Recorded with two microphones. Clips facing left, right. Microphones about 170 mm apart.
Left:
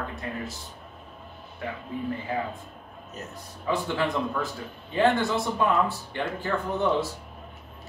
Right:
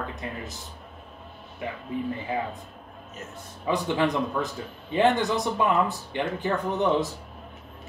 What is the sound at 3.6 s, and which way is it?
A man's voice, 20° right (ahead or behind).